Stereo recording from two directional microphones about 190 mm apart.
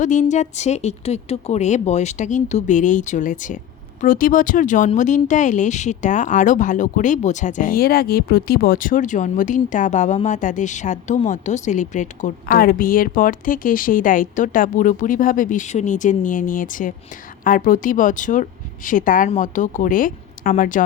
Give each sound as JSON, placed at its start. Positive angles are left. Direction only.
{"t": 0.0, "sound": "speech", "side_deg": 40}